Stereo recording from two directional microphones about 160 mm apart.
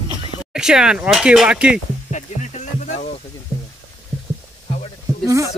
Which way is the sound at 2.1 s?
50° left (ahead or behind).